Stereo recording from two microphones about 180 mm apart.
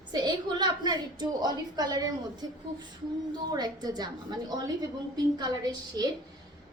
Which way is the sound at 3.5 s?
20° right (ahead or behind).